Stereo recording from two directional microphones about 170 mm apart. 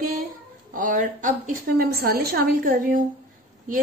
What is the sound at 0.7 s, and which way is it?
A woman's voice, 50° right (ahead or behind).